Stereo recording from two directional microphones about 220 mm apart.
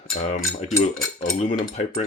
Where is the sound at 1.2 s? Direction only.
35° left (ahead or behind).